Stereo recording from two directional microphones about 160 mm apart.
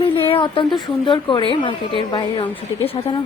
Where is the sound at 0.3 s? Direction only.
35° left (ahead or behind).